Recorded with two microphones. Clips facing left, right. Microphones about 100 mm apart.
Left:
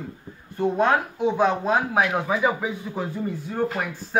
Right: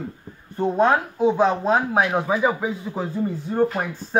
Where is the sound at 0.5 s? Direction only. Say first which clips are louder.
Right 2 dB; 20° right (ahead or behind).